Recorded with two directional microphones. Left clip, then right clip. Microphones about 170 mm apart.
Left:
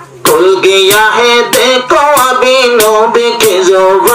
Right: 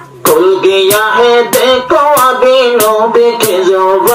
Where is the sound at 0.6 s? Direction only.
45° right (ahead or behind).